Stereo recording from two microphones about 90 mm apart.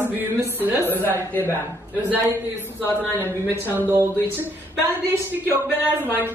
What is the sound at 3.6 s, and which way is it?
Speech, 20° right (ahead or behind).